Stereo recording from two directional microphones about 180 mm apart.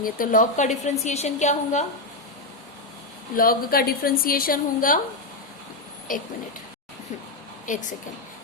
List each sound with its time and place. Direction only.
0.0 s a woman's voice: 50° left (ahead or behind)
3.3 s a woman's voice: 55° left (ahead or behind)
7.7 s a woman's voice: 45° left (ahead or behind)